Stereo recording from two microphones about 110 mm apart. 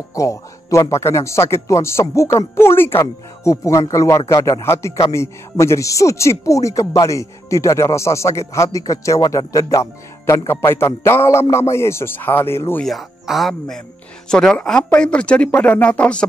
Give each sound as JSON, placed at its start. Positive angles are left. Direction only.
{"t": 0.1, "sound": "speech", "side_deg": 30}
{"t": 12.8, "sound": "speech", "side_deg": 0}